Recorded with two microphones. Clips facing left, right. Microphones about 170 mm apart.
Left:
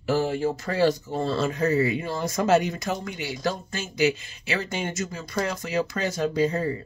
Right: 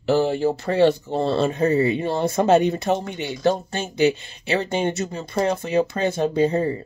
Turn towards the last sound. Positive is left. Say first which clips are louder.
# right 4 dB
turn(degrees=-30)  # may be behind; listen again after turning